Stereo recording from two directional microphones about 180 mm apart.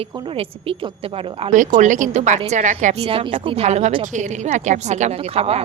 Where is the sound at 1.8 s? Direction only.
45° right (ahead or behind).